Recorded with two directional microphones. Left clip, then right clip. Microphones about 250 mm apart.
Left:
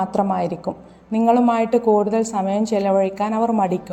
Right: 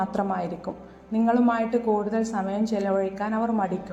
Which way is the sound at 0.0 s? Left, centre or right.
Left.